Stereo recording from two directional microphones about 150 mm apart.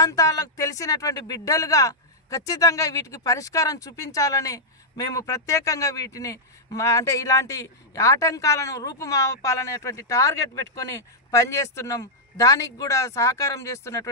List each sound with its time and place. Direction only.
0.0 s speech: 20° left (ahead or behind)